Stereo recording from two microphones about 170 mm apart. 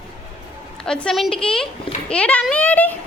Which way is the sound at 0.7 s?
5° left (ahead or behind).